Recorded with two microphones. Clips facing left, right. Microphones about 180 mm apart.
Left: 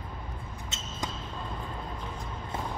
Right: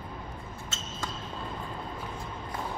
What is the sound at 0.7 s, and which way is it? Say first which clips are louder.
Basketball bounce: right 1 dB; 20° left (ahead or behind).